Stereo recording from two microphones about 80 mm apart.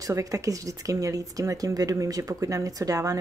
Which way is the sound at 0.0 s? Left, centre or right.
Right.